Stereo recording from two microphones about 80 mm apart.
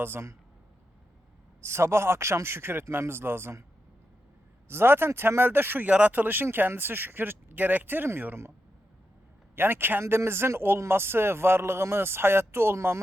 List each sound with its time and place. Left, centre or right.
0.0 s speech: right
1.6 s speech: right
4.7 s speech: right
9.6 s speech: right